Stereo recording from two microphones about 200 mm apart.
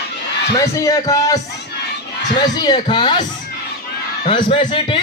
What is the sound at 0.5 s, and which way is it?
A man's voice, 15° left (ahead or behind).